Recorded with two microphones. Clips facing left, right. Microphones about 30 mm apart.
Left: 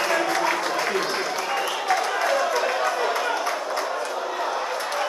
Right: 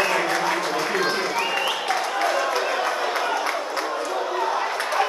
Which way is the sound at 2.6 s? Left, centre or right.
Centre.